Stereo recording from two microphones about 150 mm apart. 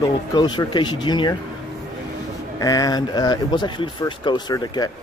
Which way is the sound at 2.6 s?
25° left (ahead or behind).